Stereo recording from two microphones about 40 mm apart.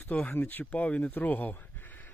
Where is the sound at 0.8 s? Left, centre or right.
Left.